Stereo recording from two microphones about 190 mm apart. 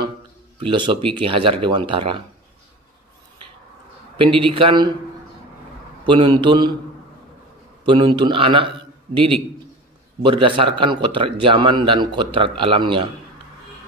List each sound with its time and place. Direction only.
0.6 s a man's voice: 25° right (ahead or behind)
4.2 s a man's voice: 25° right (ahead or behind)
6.0 s a man's voice: 25° right (ahead or behind)
7.8 s a man's voice: 25° right (ahead or behind)